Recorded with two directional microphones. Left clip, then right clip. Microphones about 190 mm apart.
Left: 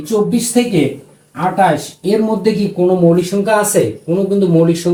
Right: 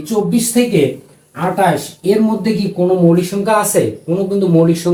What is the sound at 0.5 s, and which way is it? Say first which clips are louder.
Speech: right 1 dB; 5° right (ahead or behind).